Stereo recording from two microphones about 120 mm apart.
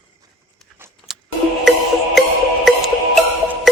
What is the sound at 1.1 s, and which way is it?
Printer, 5° right (ahead or behind).